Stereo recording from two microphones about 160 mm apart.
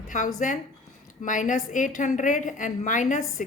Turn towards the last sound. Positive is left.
turn(degrees=50)  # may be behind; listen again after turning